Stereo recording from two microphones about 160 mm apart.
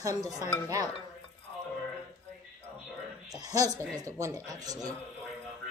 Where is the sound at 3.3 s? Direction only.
25° right (ahead or behind).